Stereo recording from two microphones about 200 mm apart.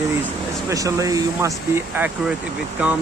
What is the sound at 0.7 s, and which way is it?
Speech, 15° right (ahead or behind).